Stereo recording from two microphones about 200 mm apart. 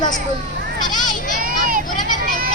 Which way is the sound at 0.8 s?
20° left (ahead or behind).